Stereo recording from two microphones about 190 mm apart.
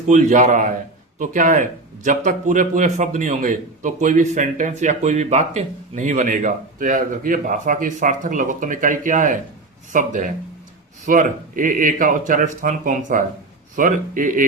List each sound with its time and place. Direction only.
0.1 s a man's voice: 40° right (ahead or behind)